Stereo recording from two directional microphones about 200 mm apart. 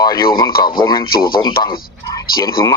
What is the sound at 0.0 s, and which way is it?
Radio, 20° left (ahead or behind).